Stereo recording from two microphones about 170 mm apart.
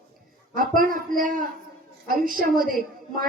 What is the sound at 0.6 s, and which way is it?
A woman's voice, 55° right (ahead or behind).